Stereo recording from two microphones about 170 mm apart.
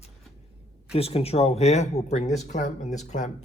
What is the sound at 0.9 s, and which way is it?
Speech, 35° left (ahead or behind).